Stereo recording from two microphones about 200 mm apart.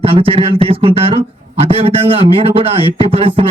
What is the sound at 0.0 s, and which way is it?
A man's voice, 30° right (ahead or behind).